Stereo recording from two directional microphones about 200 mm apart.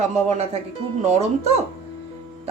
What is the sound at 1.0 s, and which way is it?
Speech, 35° right (ahead or behind).